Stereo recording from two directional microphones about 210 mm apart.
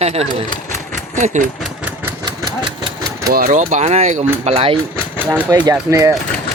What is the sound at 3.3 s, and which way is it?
Speech, 40° right (ahead or behind).